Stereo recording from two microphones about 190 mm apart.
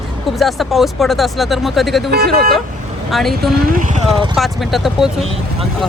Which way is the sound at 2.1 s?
55° right (ahead or behind).